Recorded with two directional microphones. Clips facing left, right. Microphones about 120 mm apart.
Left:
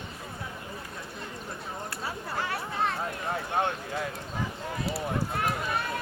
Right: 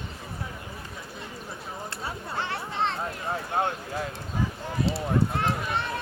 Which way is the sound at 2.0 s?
25° right (ahead or behind).